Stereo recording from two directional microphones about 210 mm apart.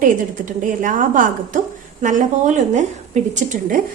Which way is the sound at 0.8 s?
40° right (ahead or behind).